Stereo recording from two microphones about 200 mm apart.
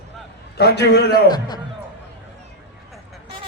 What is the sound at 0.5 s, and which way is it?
Speech, 55° left (ahead or behind).